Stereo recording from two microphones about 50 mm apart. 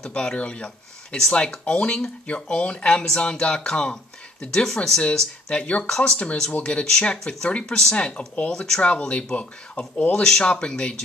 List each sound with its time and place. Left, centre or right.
0.0 s speech: centre